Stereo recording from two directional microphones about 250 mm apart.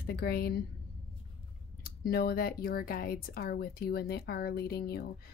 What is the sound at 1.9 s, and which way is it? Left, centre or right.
Speech, left.